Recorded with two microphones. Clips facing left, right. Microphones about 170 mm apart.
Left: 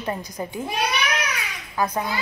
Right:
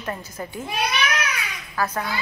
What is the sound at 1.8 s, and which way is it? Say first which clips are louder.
Speech: left 2 dB; 15° left (ahead or behind).